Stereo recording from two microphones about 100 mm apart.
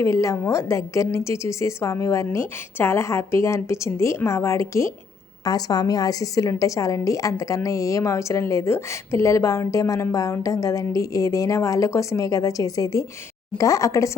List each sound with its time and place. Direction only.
0.0 s a woman's voice: 30° left (ahead or behind)